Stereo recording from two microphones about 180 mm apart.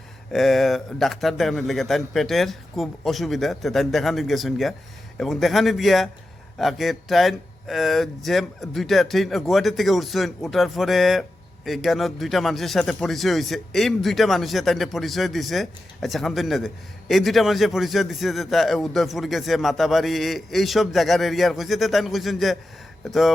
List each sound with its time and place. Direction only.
0.3 s speech: centre (ahead or behind)